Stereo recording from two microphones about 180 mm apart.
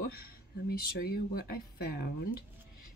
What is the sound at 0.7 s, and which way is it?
Speech, 60° left (ahead or behind).